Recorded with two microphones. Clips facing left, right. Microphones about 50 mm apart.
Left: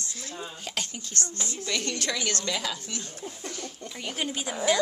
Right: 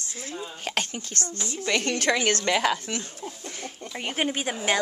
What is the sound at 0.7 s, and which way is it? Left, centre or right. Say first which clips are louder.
Speech: right 6 dB; right.